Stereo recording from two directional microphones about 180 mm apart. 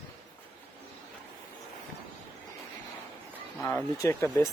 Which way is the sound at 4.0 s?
15° left (ahead or behind).